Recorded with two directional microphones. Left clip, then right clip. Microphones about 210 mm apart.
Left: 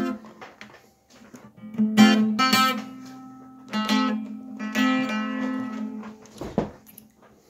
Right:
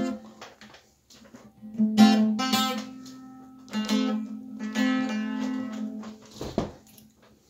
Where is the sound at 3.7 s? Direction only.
45° left (ahead or behind).